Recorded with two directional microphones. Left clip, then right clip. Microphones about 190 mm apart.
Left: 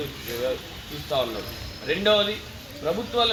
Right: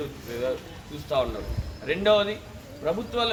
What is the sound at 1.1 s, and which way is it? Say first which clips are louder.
A man's voice: even; 20° right (ahead or behind).